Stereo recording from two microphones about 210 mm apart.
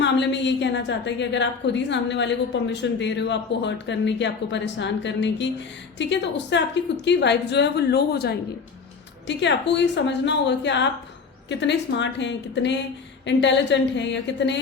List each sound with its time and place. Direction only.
0.0 s a woman's voice: 55° left (ahead or behind)